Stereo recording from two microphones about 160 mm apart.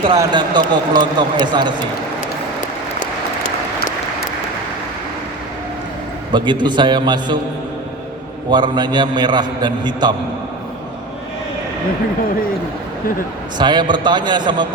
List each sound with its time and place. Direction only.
0.0 s speech: 30° right (ahead or behind)
6.3 s speech: 30° right (ahead or behind)
8.4 s speech: 25° right (ahead or behind)
13.6 s speech: 30° right (ahead or behind)